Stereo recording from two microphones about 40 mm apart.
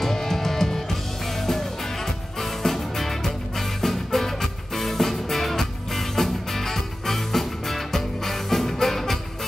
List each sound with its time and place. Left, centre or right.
0.0 s music: centre
2.4 s music: centre